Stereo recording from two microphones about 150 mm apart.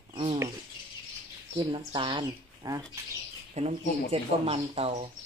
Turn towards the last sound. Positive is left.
turn(degrees=-40)  # may be behind; listen again after turning